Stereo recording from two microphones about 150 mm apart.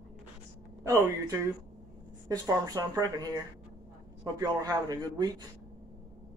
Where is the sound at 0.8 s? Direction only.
20° right (ahead or behind).